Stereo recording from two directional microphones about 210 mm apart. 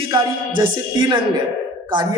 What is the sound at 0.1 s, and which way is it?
A man's voice, 20° right (ahead or behind).